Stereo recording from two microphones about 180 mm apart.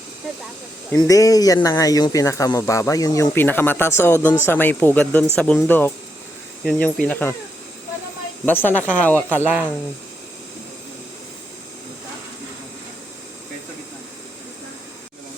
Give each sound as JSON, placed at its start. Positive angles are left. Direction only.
{"t": 0.9, "sound": "speech", "side_deg": 20}
{"t": 8.4, "sound": "speech", "side_deg": 10}
{"t": 9.3, "sound": "speech", "side_deg": -10}